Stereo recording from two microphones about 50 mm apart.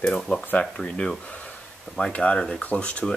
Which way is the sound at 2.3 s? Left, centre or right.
Centre.